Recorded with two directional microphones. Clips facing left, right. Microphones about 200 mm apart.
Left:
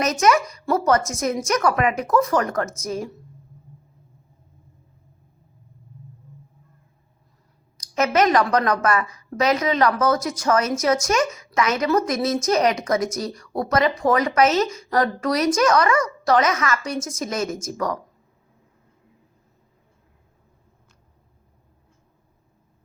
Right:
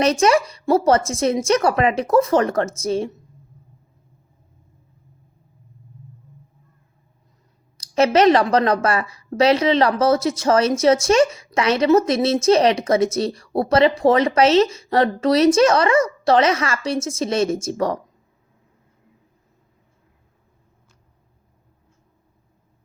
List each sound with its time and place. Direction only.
0.0 s a woman's voice: 30° right (ahead or behind)
7.8 s a woman's voice: 30° right (ahead or behind)